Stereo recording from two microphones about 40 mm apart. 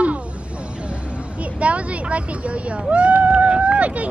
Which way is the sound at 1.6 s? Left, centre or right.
Right.